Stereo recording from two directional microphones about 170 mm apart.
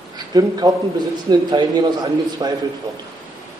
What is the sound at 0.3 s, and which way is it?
A man's voice, 25° right (ahead or behind).